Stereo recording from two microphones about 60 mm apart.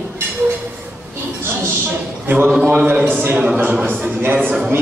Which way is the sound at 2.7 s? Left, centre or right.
Centre.